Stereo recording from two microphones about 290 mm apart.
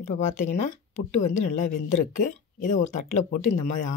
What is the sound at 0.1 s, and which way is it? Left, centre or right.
Speech, left.